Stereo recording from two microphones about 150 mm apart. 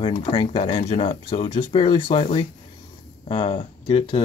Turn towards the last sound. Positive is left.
turn(degrees=35)  # may be behind; listen again after turning